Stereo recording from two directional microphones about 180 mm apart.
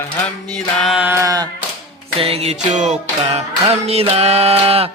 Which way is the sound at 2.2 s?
35° right (ahead or behind).